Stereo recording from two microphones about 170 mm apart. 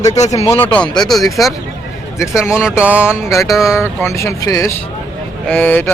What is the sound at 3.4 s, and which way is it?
Speech, centre (ahead or behind).